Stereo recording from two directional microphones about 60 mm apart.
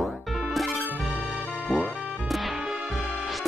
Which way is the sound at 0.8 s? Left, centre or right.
Right.